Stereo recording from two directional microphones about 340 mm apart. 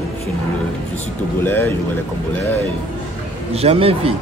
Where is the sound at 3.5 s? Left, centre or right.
Centre.